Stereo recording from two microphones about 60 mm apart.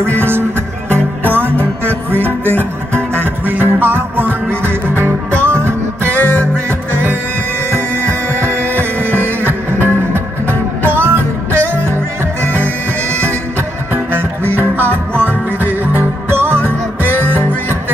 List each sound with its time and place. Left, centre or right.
0.0 s music: right
7.7 s music: right
13.1 s music: right